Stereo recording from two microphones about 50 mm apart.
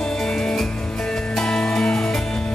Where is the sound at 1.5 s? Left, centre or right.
Centre.